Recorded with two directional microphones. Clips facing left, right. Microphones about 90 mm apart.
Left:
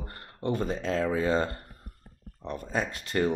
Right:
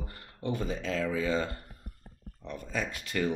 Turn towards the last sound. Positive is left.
turn(degrees=35)  # may be behind; listen again after turning